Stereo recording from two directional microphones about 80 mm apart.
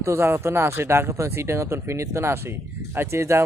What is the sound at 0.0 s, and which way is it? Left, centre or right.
Speech, right.